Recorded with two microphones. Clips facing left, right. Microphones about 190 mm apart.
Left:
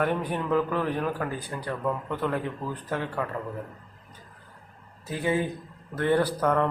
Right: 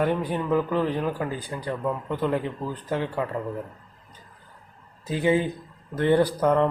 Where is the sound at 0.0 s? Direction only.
15° right (ahead or behind).